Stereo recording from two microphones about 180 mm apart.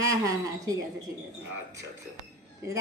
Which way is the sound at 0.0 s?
20° right (ahead or behind).